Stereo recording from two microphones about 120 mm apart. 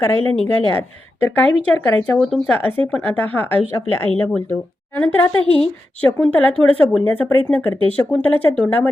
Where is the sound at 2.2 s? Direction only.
Centre (ahead or behind).